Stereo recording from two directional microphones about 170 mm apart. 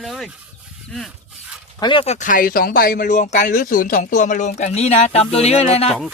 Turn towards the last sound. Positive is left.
turn(degrees=35)  # may be behind; listen again after turning